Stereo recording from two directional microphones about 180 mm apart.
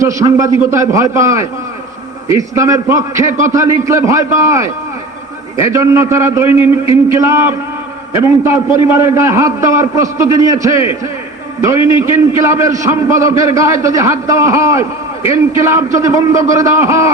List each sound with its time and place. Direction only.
0.0 s a man's voice: 15° right (ahead or behind)
11.9 s a man's voice: 15° right (ahead or behind)